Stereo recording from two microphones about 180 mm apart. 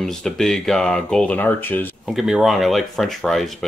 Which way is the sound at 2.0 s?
Centre (ahead or behind).